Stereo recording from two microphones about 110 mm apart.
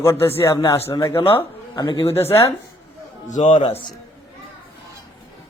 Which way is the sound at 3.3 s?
90° left.